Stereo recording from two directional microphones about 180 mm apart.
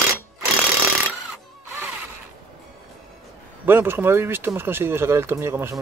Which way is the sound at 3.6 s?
10° right (ahead or behind).